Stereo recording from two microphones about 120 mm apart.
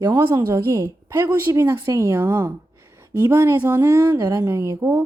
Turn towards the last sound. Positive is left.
turn(degrees=-25)  # may be behind; listen again after turning